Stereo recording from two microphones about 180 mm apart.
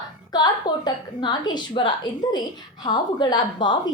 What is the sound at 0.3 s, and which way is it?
A woman's voice, 20° left (ahead or behind).